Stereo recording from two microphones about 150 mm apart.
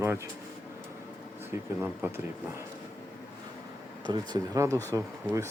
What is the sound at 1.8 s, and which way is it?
Speech, 15° right (ahead or behind).